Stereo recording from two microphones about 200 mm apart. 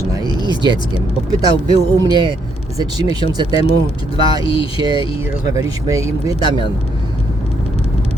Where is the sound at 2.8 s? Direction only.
20° right (ahead or behind).